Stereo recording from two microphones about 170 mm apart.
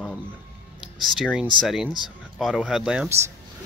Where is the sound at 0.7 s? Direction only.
Centre (ahead or behind).